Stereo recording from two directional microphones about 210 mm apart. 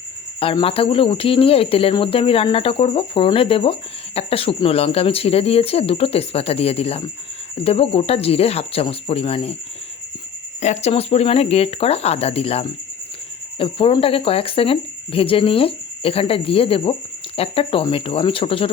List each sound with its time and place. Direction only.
0.3 s speech: 25° left (ahead or behind)
10.6 s speech: 30° left (ahead or behind)